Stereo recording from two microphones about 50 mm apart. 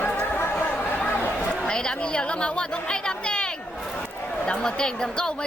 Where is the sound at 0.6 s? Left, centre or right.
Left.